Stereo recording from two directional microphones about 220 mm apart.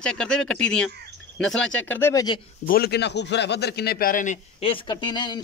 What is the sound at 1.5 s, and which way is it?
Speech, 60° left (ahead or behind).